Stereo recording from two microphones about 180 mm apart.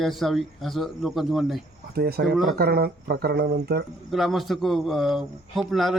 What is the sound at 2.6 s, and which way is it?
Speech, 60° right (ahead or behind).